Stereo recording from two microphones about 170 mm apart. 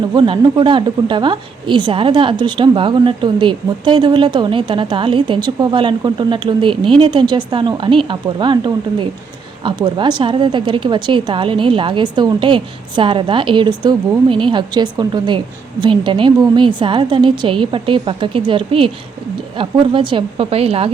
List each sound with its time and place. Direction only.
0.1 s a woman's voice: 25° right (ahead or behind)